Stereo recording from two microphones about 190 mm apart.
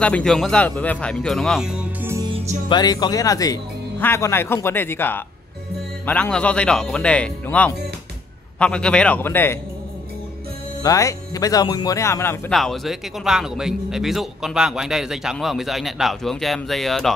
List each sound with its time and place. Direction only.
0.0 s speech: 5° left (ahead or behind); by 2.2 s 10° right (ahead or behind)
2.2 s music: 30° right (ahead or behind)
2.7 s speech: 20° left (ahead or behind)
10.8 s speech: 15° left (ahead or behind)
12.5 s speech: centre (ahead or behind)